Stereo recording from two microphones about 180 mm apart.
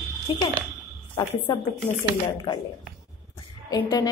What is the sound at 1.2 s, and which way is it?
Speech, 25° left (ahead or behind).